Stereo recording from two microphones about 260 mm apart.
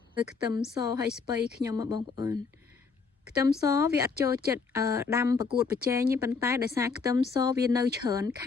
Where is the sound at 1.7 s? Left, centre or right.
Centre.